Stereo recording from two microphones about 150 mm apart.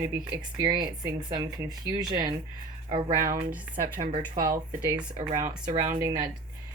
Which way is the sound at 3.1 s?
65° right (ahead or behind).